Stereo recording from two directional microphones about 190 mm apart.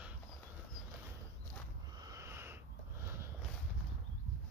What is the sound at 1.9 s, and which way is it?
Wheeze, 20° right (ahead or behind).